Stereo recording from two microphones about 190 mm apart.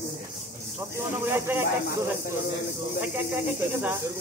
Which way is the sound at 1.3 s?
10° right (ahead or behind).